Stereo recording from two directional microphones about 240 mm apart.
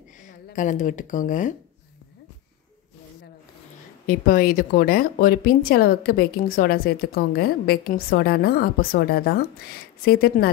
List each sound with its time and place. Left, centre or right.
0.2 s speech: left
4.0 s speech: left